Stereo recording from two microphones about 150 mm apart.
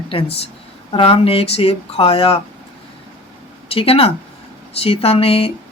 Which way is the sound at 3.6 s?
40° left (ahead or behind).